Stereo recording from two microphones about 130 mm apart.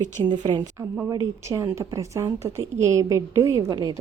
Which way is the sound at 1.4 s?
20° right (ahead or behind).